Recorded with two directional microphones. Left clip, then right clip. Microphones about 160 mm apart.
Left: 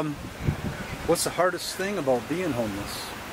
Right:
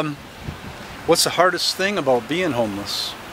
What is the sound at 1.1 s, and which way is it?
Speech, 40° right (ahead or behind).